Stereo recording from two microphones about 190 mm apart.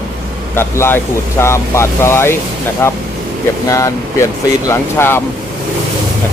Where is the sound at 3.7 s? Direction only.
15° left (ahead or behind).